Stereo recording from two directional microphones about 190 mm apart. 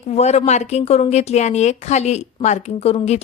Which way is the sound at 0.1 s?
35° left (ahead or behind).